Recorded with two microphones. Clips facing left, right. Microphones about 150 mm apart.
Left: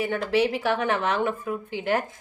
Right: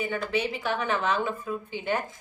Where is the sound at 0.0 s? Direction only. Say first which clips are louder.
Left 5 dB; 70° left (ahead or behind).